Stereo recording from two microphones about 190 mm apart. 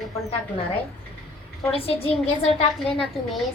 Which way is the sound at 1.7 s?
30° left (ahead or behind).